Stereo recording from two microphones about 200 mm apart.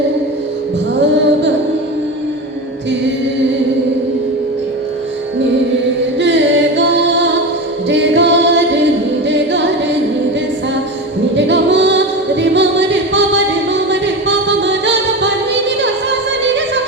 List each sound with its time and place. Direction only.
6.1 s a capella: 65° right (ahead or behind)
9.3 s singing: 60° right (ahead or behind)
11.3 s music: 60° right (ahead or behind)